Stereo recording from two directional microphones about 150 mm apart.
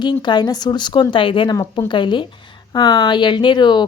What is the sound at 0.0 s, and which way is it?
A woman's voice, 30° left (ahead or behind).